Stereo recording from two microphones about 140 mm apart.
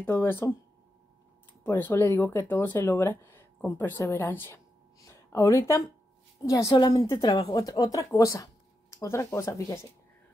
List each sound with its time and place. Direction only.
0.0 s speech: 15° left (ahead or behind)
1.6 s a woman's voice: 15° left (ahead or behind)